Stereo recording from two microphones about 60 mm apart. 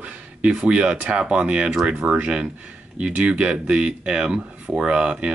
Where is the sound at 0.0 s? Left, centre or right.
Right.